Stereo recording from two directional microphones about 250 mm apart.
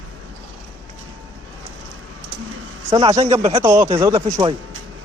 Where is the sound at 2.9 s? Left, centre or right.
Centre.